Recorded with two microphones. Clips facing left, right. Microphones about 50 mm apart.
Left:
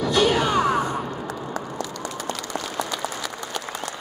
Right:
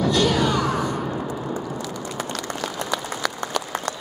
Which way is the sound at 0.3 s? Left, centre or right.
Left.